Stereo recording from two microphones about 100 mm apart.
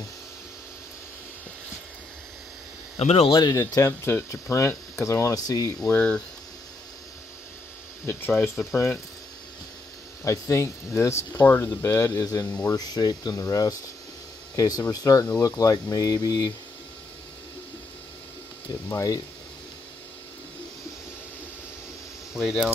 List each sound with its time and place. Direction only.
3.0 s speech: 90° left
3.3 s speech: 40° left (ahead or behind)
3.5 s speech: 30° left (ahead or behind)
5.9 s speech: 10° left (ahead or behind)
8.6 s speech: 20° left (ahead or behind)
10.2 s speech: 30° left (ahead or behind)
12.4 s speech: 15° left (ahead or behind)
12.7 s speech: 40° left (ahead or behind)
18.9 s speech: 35° left (ahead or behind)
22.3 s speech: 5° right (ahead or behind)